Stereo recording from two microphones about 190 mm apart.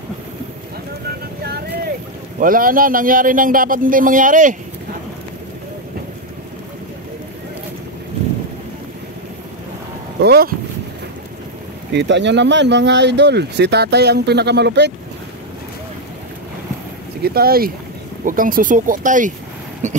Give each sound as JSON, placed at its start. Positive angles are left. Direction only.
{"t": 1.4, "sound": "vehicle", "side_deg": -55}
{"t": 2.4, "sound": "a man's voice", "side_deg": -45}
{"t": 10.2, "sound": "speech", "side_deg": -55}
{"t": 11.9, "sound": "speech", "side_deg": -65}
{"t": 17.2, "sound": "a man's voice", "side_deg": -55}